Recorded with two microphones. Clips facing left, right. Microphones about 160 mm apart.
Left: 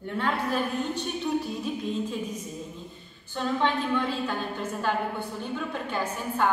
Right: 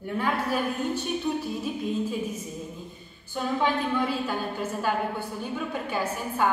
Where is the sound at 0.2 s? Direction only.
10° right (ahead or behind).